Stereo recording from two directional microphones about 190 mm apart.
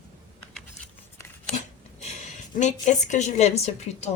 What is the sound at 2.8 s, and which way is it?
A woman's voice, 40° left (ahead or behind).